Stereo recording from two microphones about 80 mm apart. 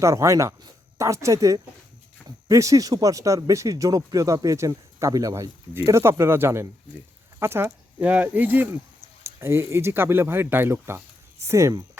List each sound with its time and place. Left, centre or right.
0.0 s speech: right
7.3 s a sound: right
8.0 s speech: centre; by 11.7 s right